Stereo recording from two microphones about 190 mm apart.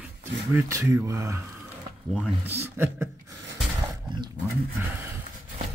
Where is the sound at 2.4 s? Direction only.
10° right (ahead or behind).